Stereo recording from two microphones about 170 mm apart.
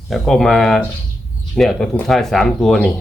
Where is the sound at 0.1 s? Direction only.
Centre (ahead or behind).